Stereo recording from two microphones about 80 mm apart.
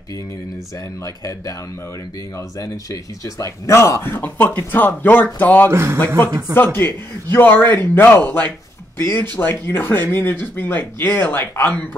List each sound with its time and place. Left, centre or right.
1.0 s speech: left
2.6 s speech: left
5.7 s a man's voice: right
5.9 s speech: left